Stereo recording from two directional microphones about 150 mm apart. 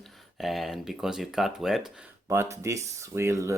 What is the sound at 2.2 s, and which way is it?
Speech, 20° right (ahead or behind).